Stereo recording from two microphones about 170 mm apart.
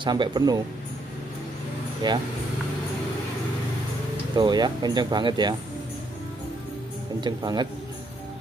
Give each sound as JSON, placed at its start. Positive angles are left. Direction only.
{"t": 0.0, "sound": "speech", "side_deg": -25}
{"t": 2.0, "sound": "speech", "side_deg": -25}
{"t": 4.4, "sound": "speech", "side_deg": -25}
{"t": 7.2, "sound": "speech", "side_deg": -25}